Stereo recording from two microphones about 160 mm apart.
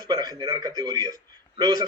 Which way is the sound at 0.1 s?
25° right (ahead or behind).